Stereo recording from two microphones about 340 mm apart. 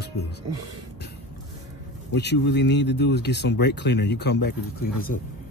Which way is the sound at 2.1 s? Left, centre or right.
Left.